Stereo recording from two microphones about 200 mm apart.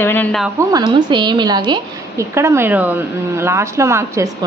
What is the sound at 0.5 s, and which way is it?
A woman's voice, 20° right (ahead or behind).